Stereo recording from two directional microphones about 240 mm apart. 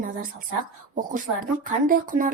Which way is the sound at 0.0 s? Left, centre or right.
Right.